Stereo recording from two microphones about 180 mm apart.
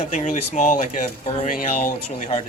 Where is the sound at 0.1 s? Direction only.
45° left (ahead or behind).